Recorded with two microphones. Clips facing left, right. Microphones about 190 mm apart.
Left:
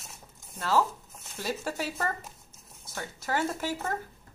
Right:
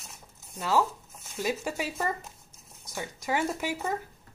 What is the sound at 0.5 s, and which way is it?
A woman's voice, 10° right (ahead or behind).